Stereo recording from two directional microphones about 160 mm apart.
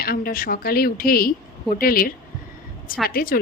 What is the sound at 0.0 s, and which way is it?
A woman's voice, 70° left (ahead or behind).